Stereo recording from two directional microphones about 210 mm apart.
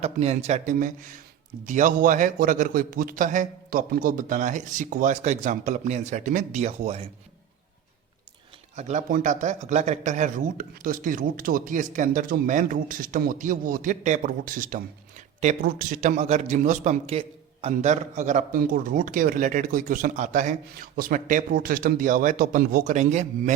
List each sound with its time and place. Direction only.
0.0 s a man's voice: 30° right (ahead or behind)
8.7 s a man's voice: 35° right (ahead or behind)